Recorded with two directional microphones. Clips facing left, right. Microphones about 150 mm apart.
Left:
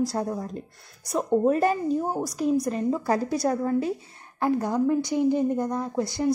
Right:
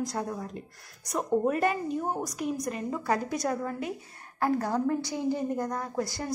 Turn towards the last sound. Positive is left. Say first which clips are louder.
# left 5 dB
turn(degrees=20)  # may be behind; listen again after turning